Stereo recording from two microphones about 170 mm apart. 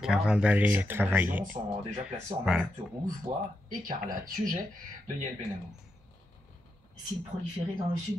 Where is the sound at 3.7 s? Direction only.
55° right (ahead or behind).